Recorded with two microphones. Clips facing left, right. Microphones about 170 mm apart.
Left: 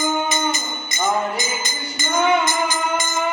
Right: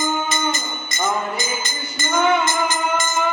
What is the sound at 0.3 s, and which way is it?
Music, 15° left (ahead or behind).